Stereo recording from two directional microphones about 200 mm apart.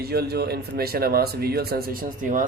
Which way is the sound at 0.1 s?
55° right (ahead or behind).